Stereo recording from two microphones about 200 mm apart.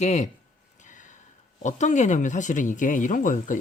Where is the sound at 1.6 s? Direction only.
35° left (ahead or behind).